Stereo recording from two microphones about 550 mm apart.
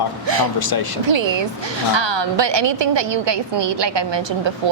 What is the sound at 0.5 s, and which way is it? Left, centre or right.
Speech, left.